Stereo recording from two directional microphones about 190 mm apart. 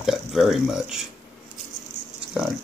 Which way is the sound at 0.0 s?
Centre (ahead or behind).